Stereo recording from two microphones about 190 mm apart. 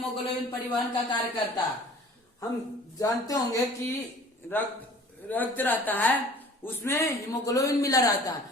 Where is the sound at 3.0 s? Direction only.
20° left (ahead or behind).